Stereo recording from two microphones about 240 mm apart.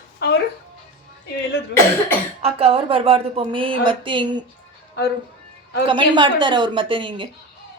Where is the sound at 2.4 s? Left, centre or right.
Right.